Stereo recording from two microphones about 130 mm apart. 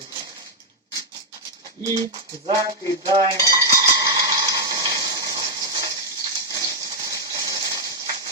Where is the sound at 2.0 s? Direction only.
30° right (ahead or behind).